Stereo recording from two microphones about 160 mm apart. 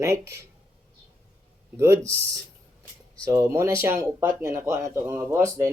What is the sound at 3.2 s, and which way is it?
Speech, 20° right (ahead or behind).